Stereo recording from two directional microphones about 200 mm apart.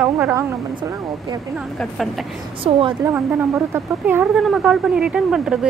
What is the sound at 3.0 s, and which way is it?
A woman's voice, 10° right (ahead or behind).